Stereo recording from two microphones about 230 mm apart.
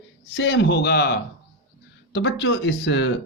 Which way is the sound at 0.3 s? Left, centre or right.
Left.